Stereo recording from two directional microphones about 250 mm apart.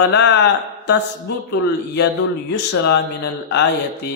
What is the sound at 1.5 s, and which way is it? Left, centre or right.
Speech, left.